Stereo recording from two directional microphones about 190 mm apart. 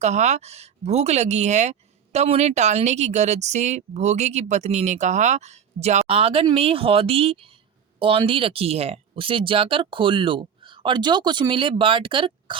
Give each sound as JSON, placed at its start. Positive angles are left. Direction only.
{"t": 0.0, "sound": "speech", "side_deg": -35}